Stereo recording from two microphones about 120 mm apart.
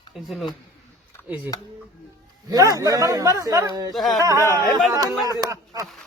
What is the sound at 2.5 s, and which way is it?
A man's voice, 30° right (ahead or behind).